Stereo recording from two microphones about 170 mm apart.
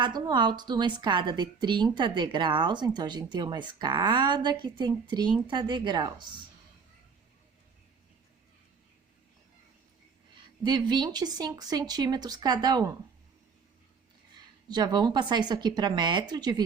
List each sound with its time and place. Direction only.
0.0 s a woman's voice: 25° right (ahead or behind)
10.6 s a woman's voice: 25° right (ahead or behind)
14.7 s a woman's voice: 25° right (ahead or behind)